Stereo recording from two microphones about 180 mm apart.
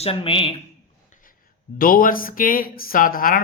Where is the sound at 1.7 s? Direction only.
50° left (ahead or behind).